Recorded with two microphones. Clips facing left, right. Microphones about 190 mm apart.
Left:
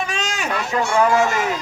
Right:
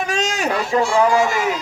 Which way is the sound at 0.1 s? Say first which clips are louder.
Right 4 dB; 40° right (ahead or behind).